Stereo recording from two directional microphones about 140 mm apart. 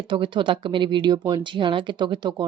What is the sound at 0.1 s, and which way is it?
Speech, 35° right (ahead or behind).